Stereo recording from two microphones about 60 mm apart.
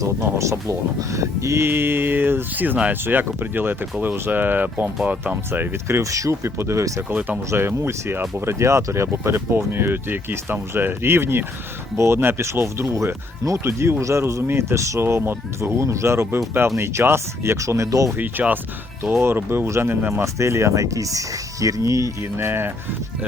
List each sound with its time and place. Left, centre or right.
0.2 s speech: right
5.5 s speech: right
5.9 s speech: right
7.1 s speech: right
7.8 s speech: right
14.4 s speech: right
15.8 s speech: right
18.2 s speech: right
20.2 s speech: right
22.2 s speech: right